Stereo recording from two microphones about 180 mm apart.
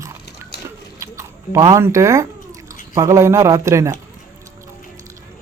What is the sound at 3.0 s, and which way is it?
A man's voice, 15° right (ahead or behind).